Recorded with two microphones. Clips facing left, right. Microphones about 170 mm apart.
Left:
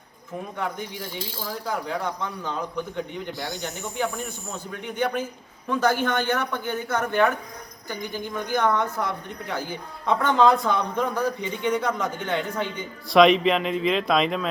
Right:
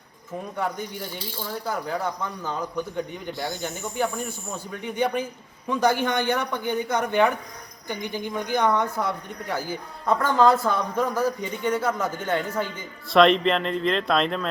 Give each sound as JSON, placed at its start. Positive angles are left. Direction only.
{"t": 1.6, "sound": "a woman's voice", "side_deg": -5}
{"t": 5.6, "sound": "a woman's voice", "side_deg": -15}